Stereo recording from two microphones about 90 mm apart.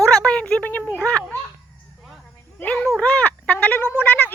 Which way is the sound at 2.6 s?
15° left (ahead or behind).